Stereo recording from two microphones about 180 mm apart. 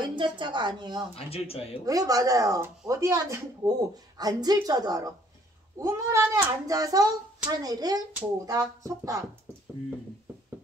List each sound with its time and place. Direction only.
0.0 s a woman's voice: 25° right (ahead or behind)
1.1 s speech: 35° left (ahead or behind)
1.9 s a woman's voice: 20° right (ahead or behind)